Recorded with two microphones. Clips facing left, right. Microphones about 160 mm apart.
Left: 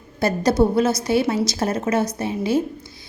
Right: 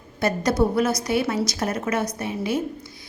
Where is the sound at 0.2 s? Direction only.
30° left (ahead or behind).